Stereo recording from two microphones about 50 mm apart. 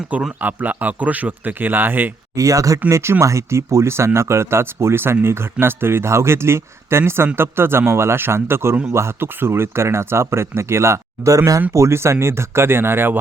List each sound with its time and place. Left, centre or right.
0.3 s speech: right
2.3 s speech: right
2.9 s a man's voice: right